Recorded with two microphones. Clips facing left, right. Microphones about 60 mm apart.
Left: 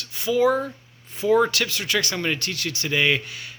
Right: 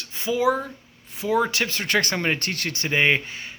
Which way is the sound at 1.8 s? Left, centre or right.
Right.